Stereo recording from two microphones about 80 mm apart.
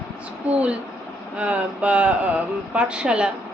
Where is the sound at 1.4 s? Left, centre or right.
Centre.